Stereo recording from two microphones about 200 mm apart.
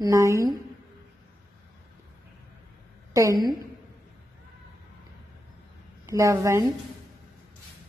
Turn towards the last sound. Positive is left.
turn(degrees=-15)  # may be behind; listen again after turning